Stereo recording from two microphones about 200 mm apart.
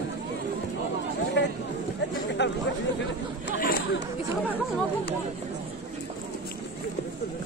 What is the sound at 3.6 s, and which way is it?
Chatter, 55° left (ahead or behind).